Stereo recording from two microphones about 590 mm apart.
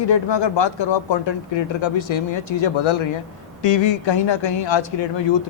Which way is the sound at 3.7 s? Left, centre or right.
Left.